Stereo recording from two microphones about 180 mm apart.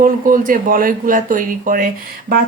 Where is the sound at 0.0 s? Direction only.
50° right (ahead or behind).